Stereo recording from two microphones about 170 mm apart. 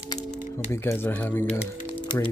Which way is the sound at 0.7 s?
15° left (ahead or behind).